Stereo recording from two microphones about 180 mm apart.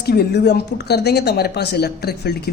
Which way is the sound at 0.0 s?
60° left (ahead or behind).